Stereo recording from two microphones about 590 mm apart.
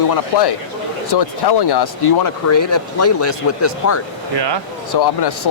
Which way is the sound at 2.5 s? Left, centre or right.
Left.